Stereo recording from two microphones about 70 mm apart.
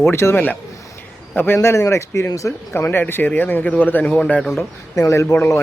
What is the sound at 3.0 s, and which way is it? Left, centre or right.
Speech, left.